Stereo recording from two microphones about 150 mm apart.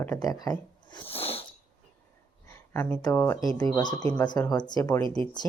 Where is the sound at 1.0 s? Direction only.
40° left (ahead or behind).